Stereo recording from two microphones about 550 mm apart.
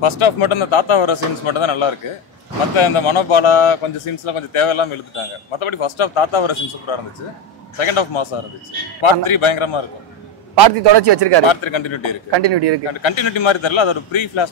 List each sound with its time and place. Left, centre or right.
0.0 s a man's voice: left
7.7 s a man's voice: left
10.8 s speech: right
11.4 s a man's voice: left
12.3 s speech: right
13.0 s a man's voice: left